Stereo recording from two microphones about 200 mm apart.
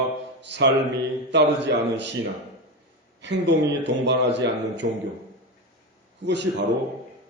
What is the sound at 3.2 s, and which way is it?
A man's voice, 60° right (ahead or behind).